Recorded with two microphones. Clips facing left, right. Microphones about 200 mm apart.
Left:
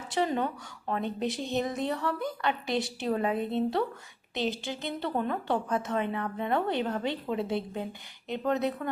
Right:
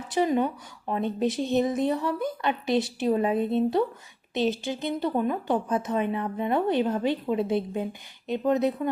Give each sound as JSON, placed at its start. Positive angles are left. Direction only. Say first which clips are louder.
{"t": 0.1, "sound": "speech", "louder": "right 5 dB", "side_deg": -20}